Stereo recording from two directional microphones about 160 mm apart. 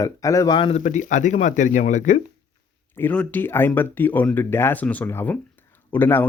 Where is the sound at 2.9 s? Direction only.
10° left (ahead or behind).